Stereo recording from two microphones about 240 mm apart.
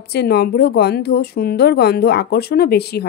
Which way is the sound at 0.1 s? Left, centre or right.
Left.